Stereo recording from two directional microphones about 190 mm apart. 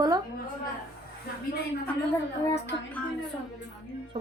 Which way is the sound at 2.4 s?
15° left (ahead or behind).